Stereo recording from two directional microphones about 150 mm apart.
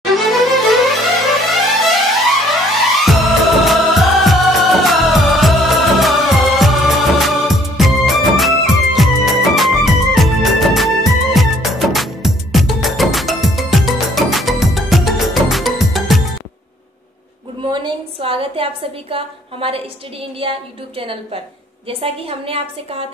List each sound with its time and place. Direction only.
0.1 s music: centre (ahead or behind)
18.2 s a sound: 40° right (ahead or behind)
21.0 s a woman's voice: 40° right (ahead or behind)